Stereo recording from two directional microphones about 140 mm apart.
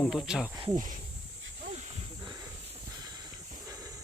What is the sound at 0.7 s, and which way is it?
Speech, 70° right (ahead or behind).